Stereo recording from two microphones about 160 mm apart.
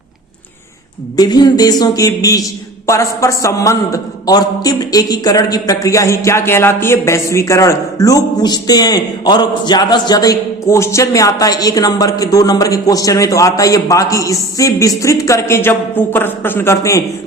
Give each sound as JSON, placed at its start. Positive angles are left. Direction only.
{"t": 1.1, "sound": "a man's voice", "side_deg": 25}